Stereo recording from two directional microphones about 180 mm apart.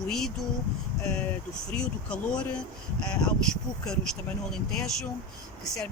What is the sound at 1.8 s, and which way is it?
Speech, 5° left (ahead or behind).